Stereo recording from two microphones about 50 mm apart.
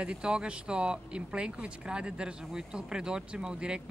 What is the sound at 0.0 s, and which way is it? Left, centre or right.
Speech, centre.